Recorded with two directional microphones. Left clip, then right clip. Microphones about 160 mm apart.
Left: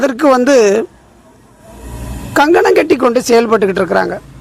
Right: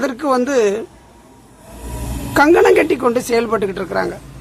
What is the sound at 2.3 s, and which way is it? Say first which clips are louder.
A woman's voice: left 2 dB; 35° left (ahead or behind).